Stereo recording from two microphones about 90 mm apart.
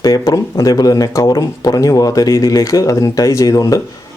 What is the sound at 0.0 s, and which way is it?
Speech, 40° left (ahead or behind).